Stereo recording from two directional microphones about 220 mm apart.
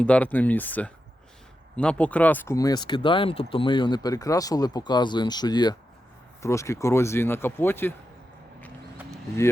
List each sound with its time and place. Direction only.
0.0 s speech: 5° left (ahead or behind)